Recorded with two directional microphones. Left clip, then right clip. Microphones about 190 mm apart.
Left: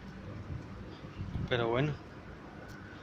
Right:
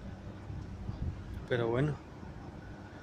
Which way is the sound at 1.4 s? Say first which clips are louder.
Left 1 dB; 20° right (ahead or behind).